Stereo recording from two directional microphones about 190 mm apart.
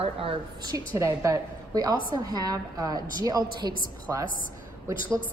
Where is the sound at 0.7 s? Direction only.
15° right (ahead or behind).